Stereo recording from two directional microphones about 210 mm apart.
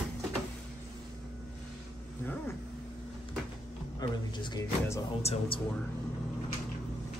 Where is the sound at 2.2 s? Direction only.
10° left (ahead or behind).